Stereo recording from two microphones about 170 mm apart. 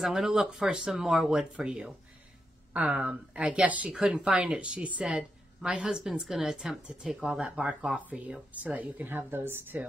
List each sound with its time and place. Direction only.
0.0 s a woman's voice: centre (ahead or behind)